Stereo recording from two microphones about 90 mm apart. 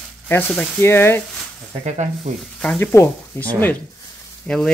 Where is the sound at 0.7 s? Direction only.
25° left (ahead or behind).